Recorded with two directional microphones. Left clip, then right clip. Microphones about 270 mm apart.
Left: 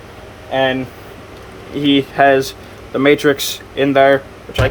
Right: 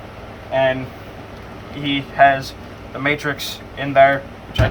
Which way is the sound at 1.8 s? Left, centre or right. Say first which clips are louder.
Left 2 dB; left.